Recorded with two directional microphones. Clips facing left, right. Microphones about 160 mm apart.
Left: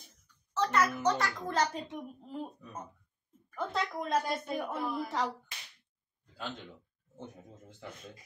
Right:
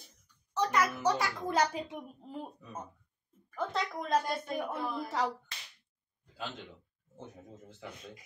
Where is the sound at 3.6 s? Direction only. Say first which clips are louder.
Even; centre (ahead or behind).